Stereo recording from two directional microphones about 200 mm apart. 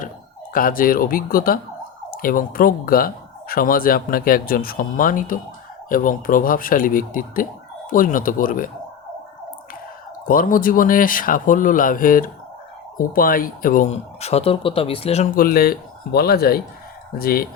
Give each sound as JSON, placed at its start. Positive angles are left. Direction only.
{"t": 0.5, "sound": "speech", "side_deg": 45}
{"t": 10.2, "sound": "speech", "side_deg": 45}
{"t": 15.4, "sound": "speech", "side_deg": 50}